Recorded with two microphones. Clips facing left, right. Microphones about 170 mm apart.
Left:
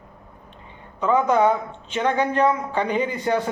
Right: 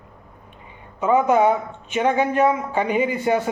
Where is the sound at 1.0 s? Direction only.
10° right (ahead or behind).